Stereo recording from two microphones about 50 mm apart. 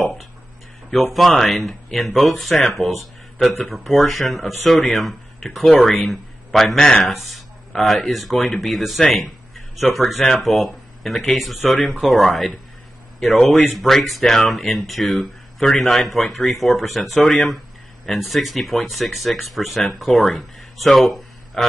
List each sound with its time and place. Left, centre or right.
0.0 s a sound: centre
0.8 s speech: centre
5.7 s speech: centre
5.9 s a man's voice: centre
6.8 s speech: centre
7.1 s speech: centre
13.7 s speech: centre